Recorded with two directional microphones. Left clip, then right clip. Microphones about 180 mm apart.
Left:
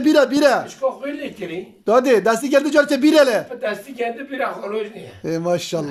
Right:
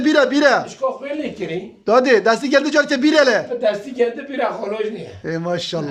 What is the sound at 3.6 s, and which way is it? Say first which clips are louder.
Speech: right 6 dB; 25° right (ahead or behind).